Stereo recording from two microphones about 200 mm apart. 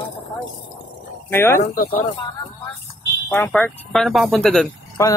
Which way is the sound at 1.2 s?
10° left (ahead or behind).